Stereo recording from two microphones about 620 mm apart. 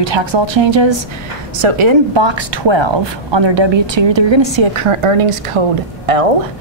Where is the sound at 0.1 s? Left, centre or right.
Right.